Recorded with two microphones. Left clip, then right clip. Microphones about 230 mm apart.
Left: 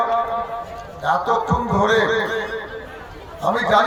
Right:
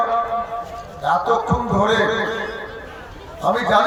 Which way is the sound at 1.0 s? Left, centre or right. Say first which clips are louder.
Right 1 dB; left.